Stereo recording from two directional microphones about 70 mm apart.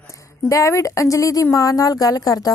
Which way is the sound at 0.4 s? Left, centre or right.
Left.